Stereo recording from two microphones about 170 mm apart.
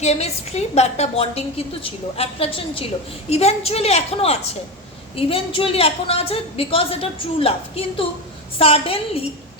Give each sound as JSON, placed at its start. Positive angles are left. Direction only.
{"t": 0.0, "sound": "a woman's voice", "side_deg": 40}